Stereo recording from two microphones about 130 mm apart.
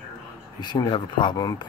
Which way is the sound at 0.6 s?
35° left (ahead or behind).